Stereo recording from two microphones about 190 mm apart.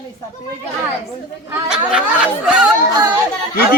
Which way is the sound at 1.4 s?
5° right (ahead or behind).